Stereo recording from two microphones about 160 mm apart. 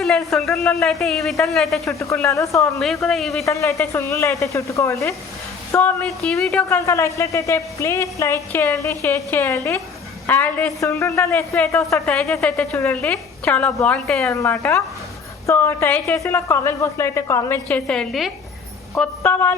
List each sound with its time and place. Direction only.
0.3 s speech: centre (ahead or behind)
1.8 s a woman's voice: 20° left (ahead or behind)
2.8 s speech: centre (ahead or behind)
3.4 s a woman's voice: 20° left (ahead or behind); by 6.7 s centre (ahead or behind)
6.7 s a woman's voice: 20° left (ahead or behind)
12.4 s speech: 5° left (ahead or behind)
12.7 s a woman's voice: 15° left (ahead or behind)
14.3 s a woman's voice: 15° left (ahead or behind)
19.2 s a woman's voice: 15° left (ahead or behind)